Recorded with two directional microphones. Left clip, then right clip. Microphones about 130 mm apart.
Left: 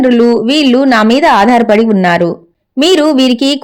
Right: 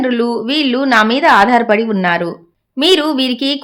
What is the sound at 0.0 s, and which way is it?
A woman's voice, 35° left (ahead or behind).